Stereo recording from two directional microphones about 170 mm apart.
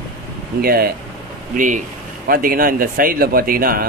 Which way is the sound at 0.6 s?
60° right (ahead or behind).